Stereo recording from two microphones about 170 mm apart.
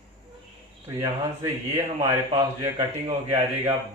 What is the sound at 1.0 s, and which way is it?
Speech, 20° right (ahead or behind).